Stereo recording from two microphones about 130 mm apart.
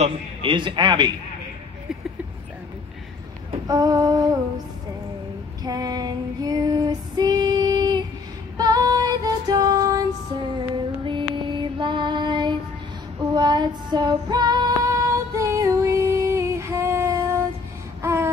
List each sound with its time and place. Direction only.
0.0 s a man's voice: 40° right (ahead or behind)
3.6 s a sound: 30° right (ahead or behind)
5.6 s female singing: 30° right (ahead or behind)
8.5 s music: 30° right (ahead or behind)
11.1 s child singing: 35° right (ahead or behind); by 17.4 s 20° right (ahead or behind)
18.0 s a sound: 20° right (ahead or behind)